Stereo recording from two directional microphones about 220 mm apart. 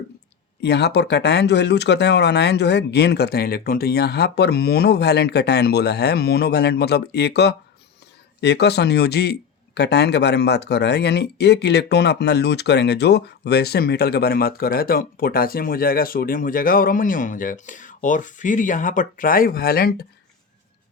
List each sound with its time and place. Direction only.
0.6 s speech: 50° left (ahead or behind)